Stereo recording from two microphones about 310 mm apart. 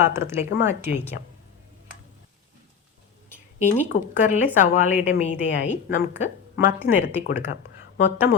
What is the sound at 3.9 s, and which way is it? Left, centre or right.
A woman's voice, left.